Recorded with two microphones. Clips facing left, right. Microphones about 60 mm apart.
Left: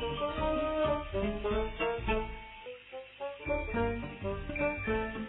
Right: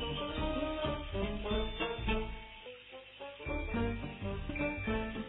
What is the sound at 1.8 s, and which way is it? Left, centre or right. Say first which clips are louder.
Music: left 5 dB; left.